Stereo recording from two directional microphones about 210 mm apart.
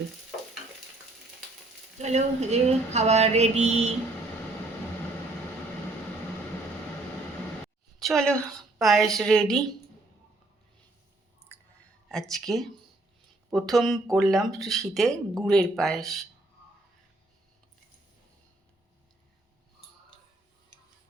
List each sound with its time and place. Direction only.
2.0 s a sound: 30° right (ahead or behind)
7.9 s a woman's voice: centre (ahead or behind)
12.0 s speech: centre (ahead or behind)